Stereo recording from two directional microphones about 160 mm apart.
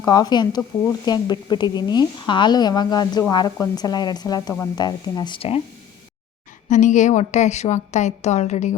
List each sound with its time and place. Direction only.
0.0 s a woman's voice: 25° left (ahead or behind)
6.7 s a woman's voice: 50° left (ahead or behind)